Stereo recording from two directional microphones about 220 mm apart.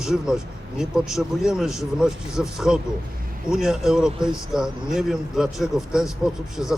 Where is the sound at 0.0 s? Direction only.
5° right (ahead or behind).